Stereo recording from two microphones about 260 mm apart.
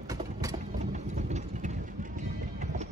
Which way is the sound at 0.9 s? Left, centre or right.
Right.